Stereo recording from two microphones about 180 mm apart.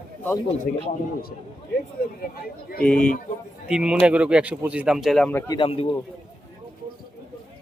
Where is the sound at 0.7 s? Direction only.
50° left (ahead or behind).